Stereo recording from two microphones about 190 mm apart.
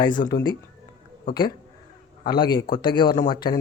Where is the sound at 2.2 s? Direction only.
25° left (ahead or behind).